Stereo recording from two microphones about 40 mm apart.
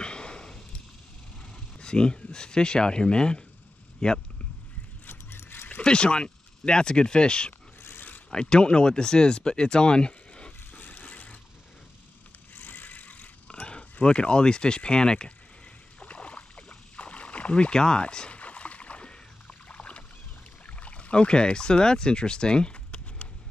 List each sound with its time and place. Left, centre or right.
0.0 s sniff: left
1.8 s speech: left
5.0 s a sound: left
5.8 s speech: left
7.8 s a sound: left
8.3 s speech: left
10.7 s vehicle: left
12.5 s vehicle: left
13.7 s speech: left
16.0 s rowboat: left
18.3 s boat: left
20.6 s speech: left